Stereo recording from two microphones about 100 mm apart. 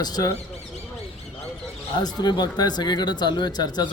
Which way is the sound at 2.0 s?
45° left (ahead or behind).